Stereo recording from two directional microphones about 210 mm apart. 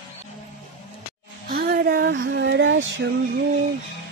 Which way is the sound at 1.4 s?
45° right (ahead or behind).